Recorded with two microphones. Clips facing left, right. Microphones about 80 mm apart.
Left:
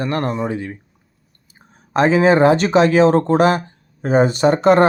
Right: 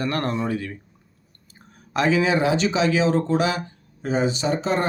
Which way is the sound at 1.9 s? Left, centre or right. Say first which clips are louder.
Left 7 dB; left.